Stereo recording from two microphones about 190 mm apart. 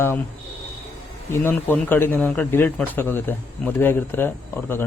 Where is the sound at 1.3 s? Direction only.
10° left (ahead or behind).